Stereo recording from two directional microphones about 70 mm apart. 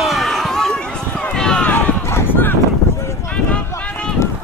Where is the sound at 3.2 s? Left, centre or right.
Centre.